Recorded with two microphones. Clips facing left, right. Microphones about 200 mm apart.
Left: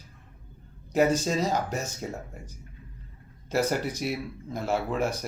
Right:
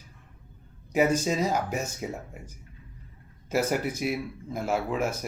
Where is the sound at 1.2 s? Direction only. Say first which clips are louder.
Even; 10° right (ahead or behind).